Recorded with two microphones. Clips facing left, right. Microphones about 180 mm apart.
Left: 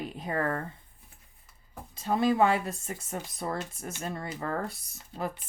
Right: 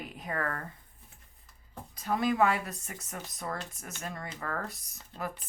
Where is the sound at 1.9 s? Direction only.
30° left (ahead or behind).